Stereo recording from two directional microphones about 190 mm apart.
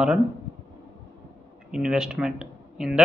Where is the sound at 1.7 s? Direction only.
5° right (ahead or behind).